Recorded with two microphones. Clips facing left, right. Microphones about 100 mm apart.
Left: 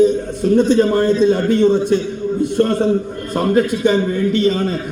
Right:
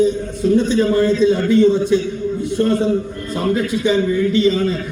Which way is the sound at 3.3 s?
50° left (ahead or behind).